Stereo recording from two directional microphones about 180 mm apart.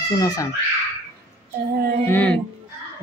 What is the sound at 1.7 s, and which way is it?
Music, 60° right (ahead or behind).